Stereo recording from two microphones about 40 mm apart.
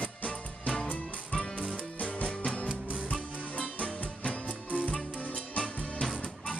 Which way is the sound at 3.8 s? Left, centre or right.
Left.